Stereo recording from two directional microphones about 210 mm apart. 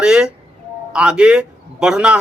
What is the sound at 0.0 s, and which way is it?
A man's voice, 5° right (ahead or behind).